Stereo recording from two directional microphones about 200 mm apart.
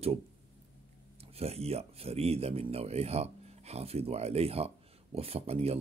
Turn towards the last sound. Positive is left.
turn(degrees=-30)  # may be behind; listen again after turning